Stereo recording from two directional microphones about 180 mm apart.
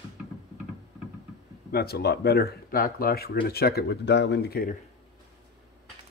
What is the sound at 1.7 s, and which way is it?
Speech, 60° left (ahead or behind).